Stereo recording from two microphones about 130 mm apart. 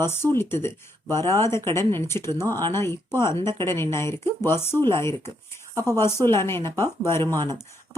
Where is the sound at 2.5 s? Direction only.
30° right (ahead or behind).